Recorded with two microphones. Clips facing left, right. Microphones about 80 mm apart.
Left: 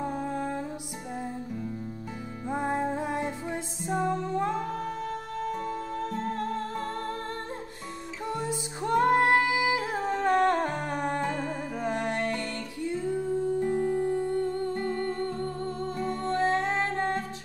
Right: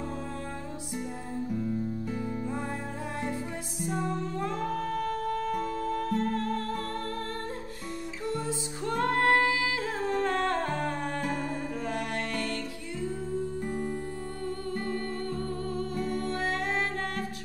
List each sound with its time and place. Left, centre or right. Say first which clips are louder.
2.5 s music: left 6 dB; left
8.3 s music: left 1 dB; left
13.7 s music: left 7 dB; left